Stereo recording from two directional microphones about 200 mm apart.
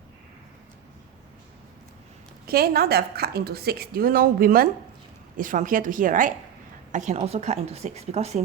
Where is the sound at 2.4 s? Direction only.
50° right (ahead or behind).